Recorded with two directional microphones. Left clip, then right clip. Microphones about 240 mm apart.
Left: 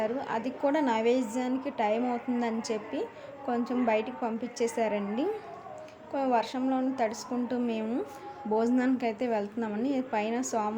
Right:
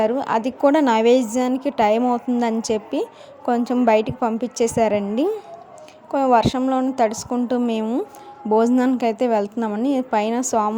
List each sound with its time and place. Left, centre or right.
0.0 s a woman's voice: right